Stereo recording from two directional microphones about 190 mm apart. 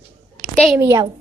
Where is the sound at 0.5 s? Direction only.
Centre (ahead or behind).